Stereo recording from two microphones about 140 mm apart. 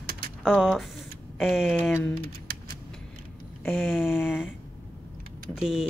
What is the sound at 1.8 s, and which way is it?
Speech, 10° left (ahead or behind).